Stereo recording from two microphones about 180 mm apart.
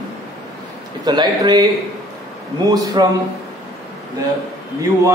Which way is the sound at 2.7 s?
20° right (ahead or behind).